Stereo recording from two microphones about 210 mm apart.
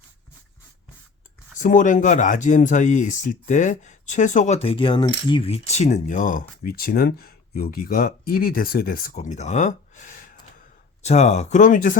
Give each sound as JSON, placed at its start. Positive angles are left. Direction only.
{"t": 1.5, "sound": "speech", "side_deg": 40}